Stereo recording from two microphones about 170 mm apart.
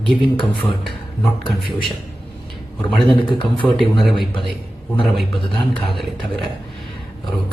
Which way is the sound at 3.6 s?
Centre (ahead or behind).